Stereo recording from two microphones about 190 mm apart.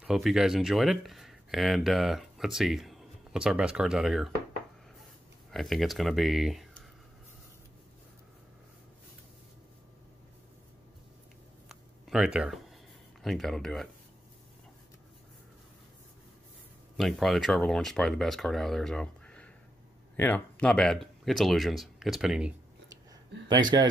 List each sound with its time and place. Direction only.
0.0 s speech: centre (ahead or behind)
5.5 s speech: centre (ahead or behind)
11.7 s a sound: centre (ahead or behind)
13.2 s speech: centre (ahead or behind)
16.9 s speech: centre (ahead or behind)
23.5 s a man's voice: 25° right (ahead or behind)